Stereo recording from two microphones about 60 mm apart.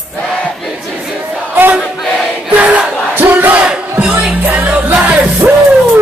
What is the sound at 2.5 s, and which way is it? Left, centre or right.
Crowd, right.